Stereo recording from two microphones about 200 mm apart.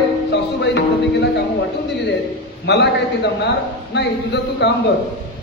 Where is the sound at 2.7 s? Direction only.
60° left (ahead or behind).